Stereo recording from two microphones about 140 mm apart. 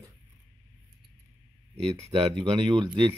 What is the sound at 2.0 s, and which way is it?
Speech, 45° right (ahead or behind).